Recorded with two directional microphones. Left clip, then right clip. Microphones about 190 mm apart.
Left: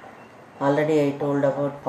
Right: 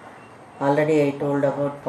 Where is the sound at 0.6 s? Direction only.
Centre (ahead or behind).